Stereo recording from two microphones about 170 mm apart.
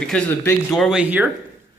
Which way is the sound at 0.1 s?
10° left (ahead or behind).